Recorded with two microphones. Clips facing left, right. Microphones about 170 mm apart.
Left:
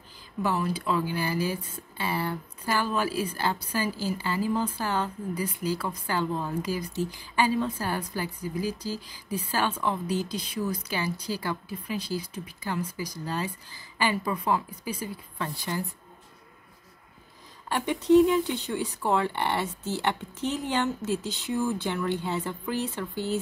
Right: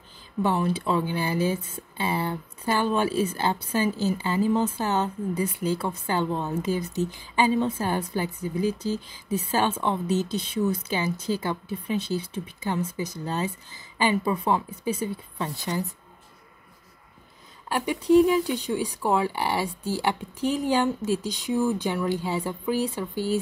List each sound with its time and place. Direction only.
0.4 s a woman's voice: 25° right (ahead or behind)
17.6 s speech: 5° right (ahead or behind)
21.2 s speech: 15° right (ahead or behind)